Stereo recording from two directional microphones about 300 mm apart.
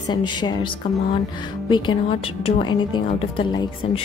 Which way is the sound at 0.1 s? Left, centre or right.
Centre.